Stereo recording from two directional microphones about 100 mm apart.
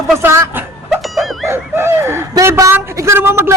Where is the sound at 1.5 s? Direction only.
25° right (ahead or behind).